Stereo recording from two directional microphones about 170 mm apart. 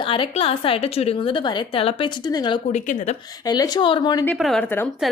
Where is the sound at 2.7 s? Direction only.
45° left (ahead or behind).